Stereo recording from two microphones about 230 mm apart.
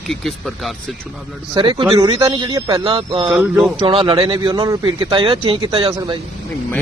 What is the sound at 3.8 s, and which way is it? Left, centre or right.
Speech, right.